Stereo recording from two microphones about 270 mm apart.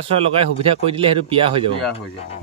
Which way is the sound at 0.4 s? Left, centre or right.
Centre.